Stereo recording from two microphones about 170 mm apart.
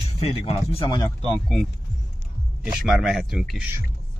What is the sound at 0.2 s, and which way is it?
Speech, 35° left (ahead or behind).